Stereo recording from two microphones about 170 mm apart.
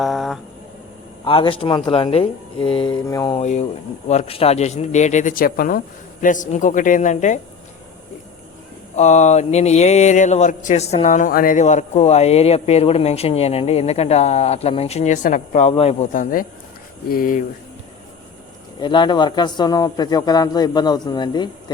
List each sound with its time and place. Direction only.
0.0 s a sound: centre (ahead or behind)
1.2 s speech: 30° left (ahead or behind)
3.3 s a man's voice: 45° left (ahead or behind)
9.0 s speech: 45° left (ahead or behind)
15.7 s speech: 35° left (ahead or behind)
17.1 s speech: 55° left (ahead or behind)
18.8 s a man's voice: 25° left (ahead or behind)